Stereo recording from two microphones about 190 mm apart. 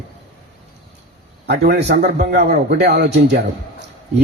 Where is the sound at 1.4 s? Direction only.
60° right (ahead or behind).